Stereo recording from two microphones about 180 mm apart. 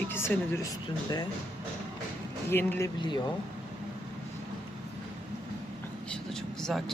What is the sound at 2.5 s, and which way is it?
Speech, 10° left (ahead or behind).